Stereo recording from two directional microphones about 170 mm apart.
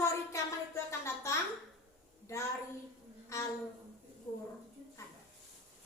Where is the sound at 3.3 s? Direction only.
20° left (ahead or behind).